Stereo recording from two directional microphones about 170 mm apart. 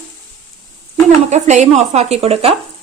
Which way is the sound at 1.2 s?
45° right (ahead or behind).